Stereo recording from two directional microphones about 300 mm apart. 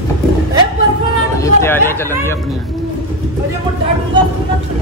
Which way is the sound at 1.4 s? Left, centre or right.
Centre.